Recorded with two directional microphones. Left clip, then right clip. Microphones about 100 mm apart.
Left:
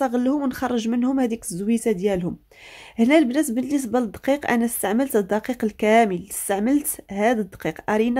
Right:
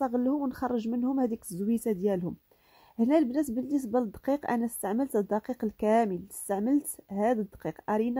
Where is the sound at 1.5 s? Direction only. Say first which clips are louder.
Left 8 dB; 80° right.